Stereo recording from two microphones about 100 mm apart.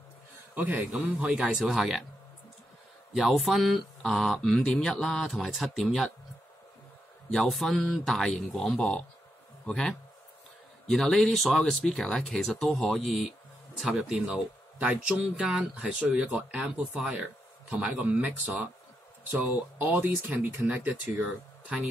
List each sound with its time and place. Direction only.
0.9 s speech: 10° right (ahead or behind)
3.2 s speech: 5° right (ahead or behind)
7.2 s a man's voice: centre (ahead or behind)